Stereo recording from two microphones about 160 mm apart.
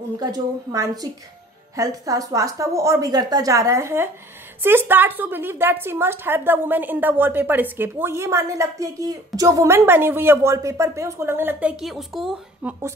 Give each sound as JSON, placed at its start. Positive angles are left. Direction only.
{"t": 0.2, "sound": "a woman's voice", "side_deg": -25}